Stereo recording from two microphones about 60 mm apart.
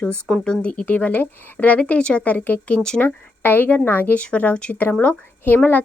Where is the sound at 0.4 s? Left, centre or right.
Centre.